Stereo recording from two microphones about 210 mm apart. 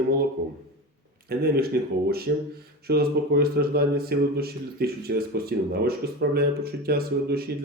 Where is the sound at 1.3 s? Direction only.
45° right (ahead or behind).